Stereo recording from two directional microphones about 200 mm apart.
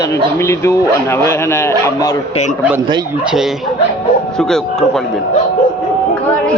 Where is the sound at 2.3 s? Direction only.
35° left (ahead or behind).